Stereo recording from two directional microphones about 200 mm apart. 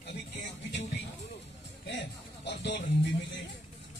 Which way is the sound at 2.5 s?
60° left (ahead or behind).